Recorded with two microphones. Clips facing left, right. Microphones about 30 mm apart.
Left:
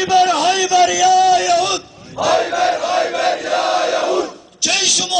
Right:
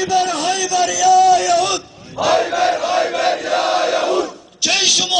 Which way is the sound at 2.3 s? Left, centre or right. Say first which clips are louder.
Even; centre.